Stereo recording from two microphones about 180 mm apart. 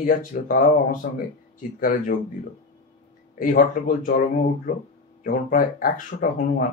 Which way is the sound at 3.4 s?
45° left (ahead or behind).